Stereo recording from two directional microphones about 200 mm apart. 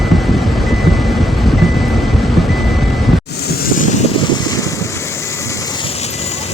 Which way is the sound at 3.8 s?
40° left (ahead or behind).